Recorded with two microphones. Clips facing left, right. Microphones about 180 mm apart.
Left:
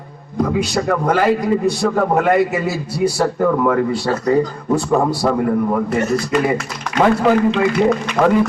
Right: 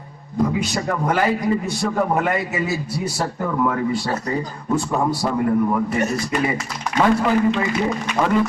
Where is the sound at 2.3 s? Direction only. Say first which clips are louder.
Left 7 dB; 65° left (ahead or behind).